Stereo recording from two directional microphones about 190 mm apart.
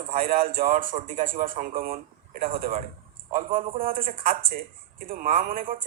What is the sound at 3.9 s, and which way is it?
Speech, 50° right (ahead or behind).